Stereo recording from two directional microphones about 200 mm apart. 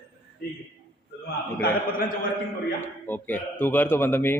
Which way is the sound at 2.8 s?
10° left (ahead or behind).